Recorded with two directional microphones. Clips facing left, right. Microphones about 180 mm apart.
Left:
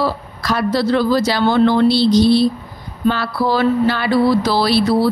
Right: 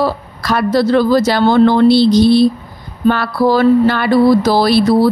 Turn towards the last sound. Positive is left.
turn(degrees=-45)  # may be behind; listen again after turning